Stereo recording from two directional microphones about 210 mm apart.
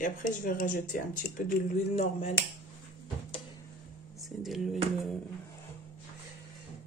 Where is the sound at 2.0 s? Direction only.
30° left (ahead or behind).